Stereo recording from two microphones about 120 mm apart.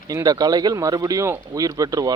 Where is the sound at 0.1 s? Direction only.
30° right (ahead or behind).